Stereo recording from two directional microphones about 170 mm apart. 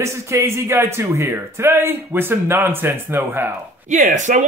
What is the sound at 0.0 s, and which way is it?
Speech, 15° right (ahead or behind).